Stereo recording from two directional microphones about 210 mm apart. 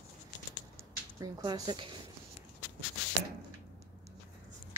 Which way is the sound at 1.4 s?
20° right (ahead or behind).